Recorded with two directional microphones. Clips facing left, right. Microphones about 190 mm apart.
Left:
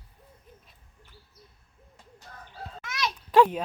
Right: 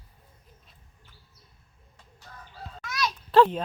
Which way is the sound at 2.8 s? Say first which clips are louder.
Right 2 dB; 25° left (ahead or behind).